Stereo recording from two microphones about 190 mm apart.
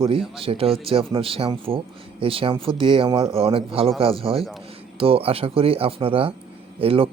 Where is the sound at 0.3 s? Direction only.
30° right (ahead or behind).